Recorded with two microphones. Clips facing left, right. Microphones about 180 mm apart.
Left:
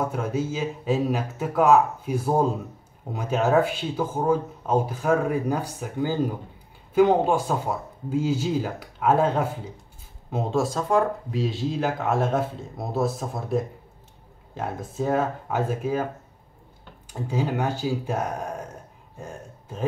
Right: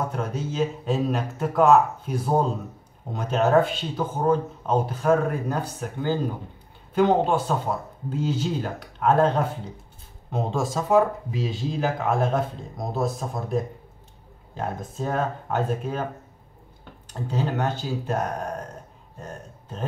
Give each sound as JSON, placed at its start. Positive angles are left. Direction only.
{"t": 0.1, "sound": "speech", "side_deg": 5}
{"t": 17.1, "sound": "speech", "side_deg": 10}
{"t": 19.1, "sound": "a sound", "side_deg": 10}